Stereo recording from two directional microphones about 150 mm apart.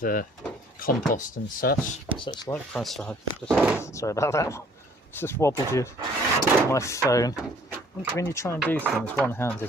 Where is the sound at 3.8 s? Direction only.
20° left (ahead or behind).